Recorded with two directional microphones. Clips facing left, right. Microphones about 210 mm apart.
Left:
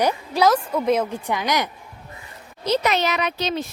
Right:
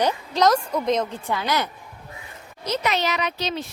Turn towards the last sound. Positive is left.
turn(degrees=50)  # may be behind; listen again after turning